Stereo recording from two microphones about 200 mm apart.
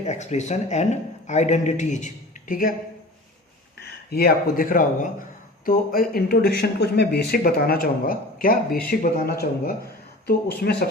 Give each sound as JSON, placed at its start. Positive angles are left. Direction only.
{"t": 0.0, "sound": "speech", "side_deg": 35}
{"t": 4.1, "sound": "speech", "side_deg": 50}